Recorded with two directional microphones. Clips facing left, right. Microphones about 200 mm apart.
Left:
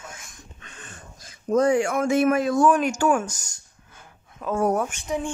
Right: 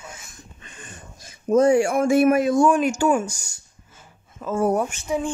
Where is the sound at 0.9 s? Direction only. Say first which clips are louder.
Right 2 dB; 20° right (ahead or behind).